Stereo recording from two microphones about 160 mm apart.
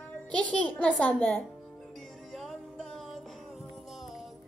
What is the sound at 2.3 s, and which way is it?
Music, centre (ahead or behind).